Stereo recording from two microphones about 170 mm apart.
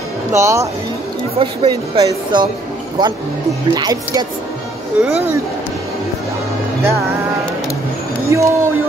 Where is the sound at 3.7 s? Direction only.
25° right (ahead or behind).